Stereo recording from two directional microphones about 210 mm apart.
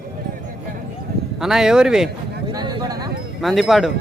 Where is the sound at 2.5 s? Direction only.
20° right (ahead or behind).